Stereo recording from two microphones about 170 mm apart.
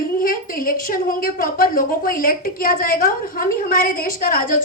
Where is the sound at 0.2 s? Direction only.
55° left (ahead or behind).